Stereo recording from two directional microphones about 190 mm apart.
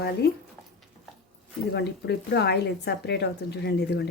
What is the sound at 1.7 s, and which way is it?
Speech, 60° left (ahead or behind).